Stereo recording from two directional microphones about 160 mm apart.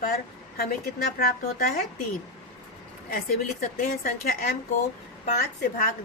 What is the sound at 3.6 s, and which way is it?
Speech, 60° left (ahead or behind).